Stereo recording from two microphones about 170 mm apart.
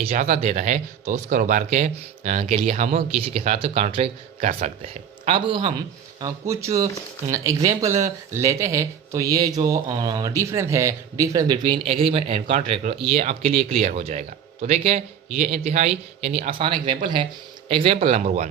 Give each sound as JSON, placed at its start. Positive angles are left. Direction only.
{"t": 0.0, "sound": "speech", "side_deg": -40}
{"t": 6.1, "sound": "speech", "side_deg": -20}